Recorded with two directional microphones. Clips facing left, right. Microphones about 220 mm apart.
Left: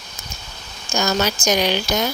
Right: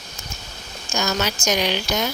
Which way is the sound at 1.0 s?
40° left (ahead or behind).